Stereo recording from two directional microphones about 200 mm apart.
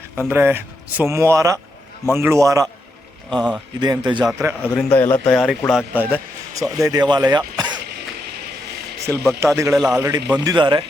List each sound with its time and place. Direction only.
0.3 s speech: 10° right (ahead or behind)
3.2 s speech: centre (ahead or behind)
3.8 s a man's voice: 20° right (ahead or behind)
4.2 s speech: 10° right (ahead or behind)
4.8 s a man's voice: 10° left (ahead or behind); by 7.8 s 20° right (ahead or behind)
9.0 s speech: 15° right (ahead or behind)
9.7 s speech: centre (ahead or behind)
10.0 s speech: 15° right (ahead or behind)